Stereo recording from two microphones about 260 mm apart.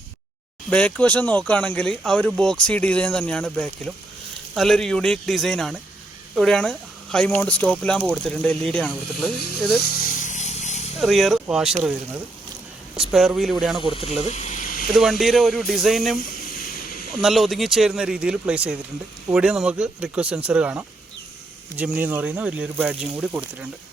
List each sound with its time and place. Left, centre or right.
0.7 s speech: centre
9.8 s a sound: left
11.0 s speech: centre
13.0 s speech: centre
13.8 s speech: left
14.3 s a sound: left
15.2 s speech: centre
16.3 s vehicle: left
17.2 s speech: centre